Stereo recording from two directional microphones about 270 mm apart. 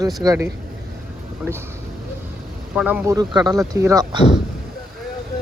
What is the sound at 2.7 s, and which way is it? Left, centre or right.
Speech, centre.